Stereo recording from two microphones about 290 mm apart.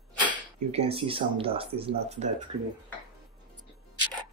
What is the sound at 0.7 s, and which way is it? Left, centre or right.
Speech, centre.